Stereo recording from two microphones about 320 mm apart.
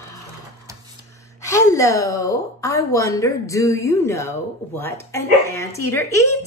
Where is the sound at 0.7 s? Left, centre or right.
Centre.